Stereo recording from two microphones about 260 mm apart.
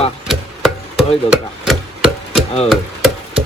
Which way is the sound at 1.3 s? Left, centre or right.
Centre.